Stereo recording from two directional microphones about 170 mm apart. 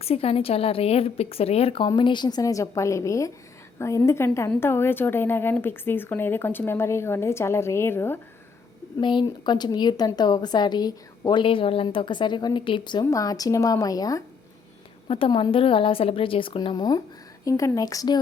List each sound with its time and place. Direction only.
0.0 s a woman's voice: 35° left (ahead or behind); by 8.2 s 15° left (ahead or behind)
9.0 s a woman's voice: 25° left (ahead or behind)
15.0 s a woman's voice: 35° left (ahead or behind)